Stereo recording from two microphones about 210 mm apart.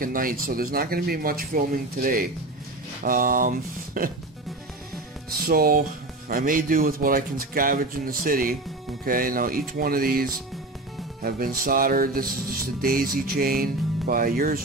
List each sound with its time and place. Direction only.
0.0 s speech: 40° right (ahead or behind)
5.3 s speech: 45° right (ahead or behind)